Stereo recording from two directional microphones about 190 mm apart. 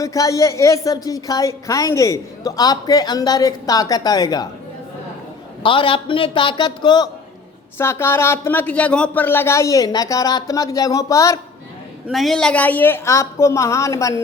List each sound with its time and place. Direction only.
0.0 s a woman's voice: 15° left (ahead or behind)
5.6 s a woman's voice: 25° left (ahead or behind)
12.0 s speech: centre (ahead or behind); by 14.2 s 15° left (ahead or behind)